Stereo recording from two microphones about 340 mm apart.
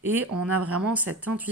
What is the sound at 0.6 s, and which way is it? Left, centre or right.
Speech, centre.